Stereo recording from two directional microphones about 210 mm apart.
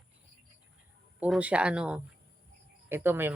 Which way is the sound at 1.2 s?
5° right (ahead or behind).